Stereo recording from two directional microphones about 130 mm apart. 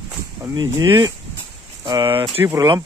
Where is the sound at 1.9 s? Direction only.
40° right (ahead or behind).